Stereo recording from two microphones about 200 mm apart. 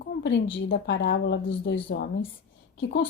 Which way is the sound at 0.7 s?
55° left (ahead or behind).